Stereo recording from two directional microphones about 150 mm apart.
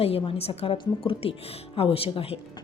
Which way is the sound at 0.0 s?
40° left (ahead or behind).